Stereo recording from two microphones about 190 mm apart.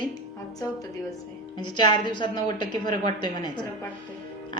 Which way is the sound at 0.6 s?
15° left (ahead or behind).